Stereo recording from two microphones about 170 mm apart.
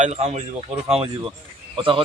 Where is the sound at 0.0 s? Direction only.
40° right (ahead or behind).